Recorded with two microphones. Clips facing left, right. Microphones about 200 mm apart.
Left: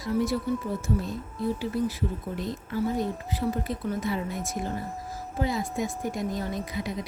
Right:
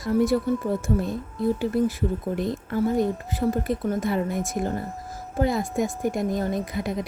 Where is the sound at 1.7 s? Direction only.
50° right (ahead or behind).